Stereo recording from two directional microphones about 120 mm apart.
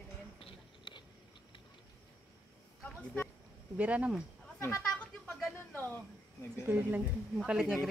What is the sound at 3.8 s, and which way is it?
Speech, 10° right (ahead or behind).